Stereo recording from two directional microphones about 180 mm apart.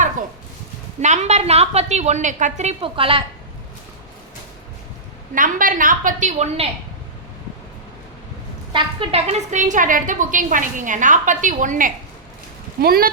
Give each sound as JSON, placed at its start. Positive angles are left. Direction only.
{"t": 1.0, "sound": "a woman's voice", "side_deg": -40}
{"t": 5.3, "sound": "a woman's voice", "side_deg": -50}
{"t": 8.7, "sound": "a woman's voice", "side_deg": -30}
{"t": 12.8, "sound": "speech", "side_deg": -55}